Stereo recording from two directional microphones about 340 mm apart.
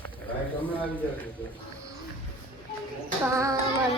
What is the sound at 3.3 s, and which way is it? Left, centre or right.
Speech, centre.